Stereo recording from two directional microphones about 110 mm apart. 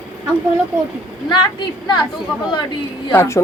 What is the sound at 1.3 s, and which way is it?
A woman's voice, 45° left (ahead or behind).